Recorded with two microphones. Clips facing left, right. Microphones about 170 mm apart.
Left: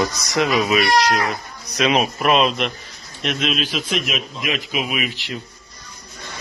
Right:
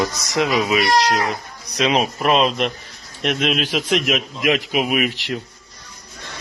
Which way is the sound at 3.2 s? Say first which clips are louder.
Right 2 dB; 60° right (ahead or behind).